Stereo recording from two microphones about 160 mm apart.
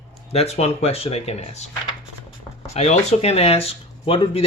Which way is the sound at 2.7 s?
40° left (ahead or behind).